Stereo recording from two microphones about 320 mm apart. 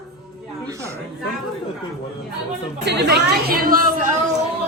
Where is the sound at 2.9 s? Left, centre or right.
Right.